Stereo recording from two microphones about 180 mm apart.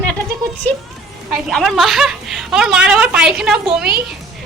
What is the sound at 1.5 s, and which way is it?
A woman's voice, centre (ahead or behind).